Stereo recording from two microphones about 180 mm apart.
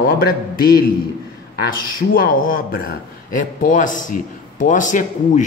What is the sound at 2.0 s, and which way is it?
Speech, 55° left (ahead or behind).